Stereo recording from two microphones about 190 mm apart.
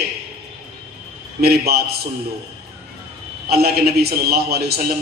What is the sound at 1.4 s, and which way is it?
Speech, 55° right (ahead or behind).